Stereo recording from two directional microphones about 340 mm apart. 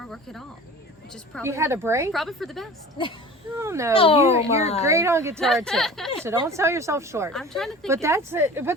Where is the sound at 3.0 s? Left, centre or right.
Centre.